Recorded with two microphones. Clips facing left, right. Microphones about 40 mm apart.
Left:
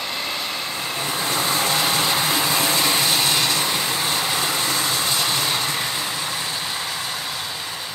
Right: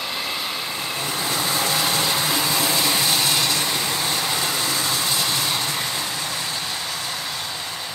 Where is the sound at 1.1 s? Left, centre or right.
Left.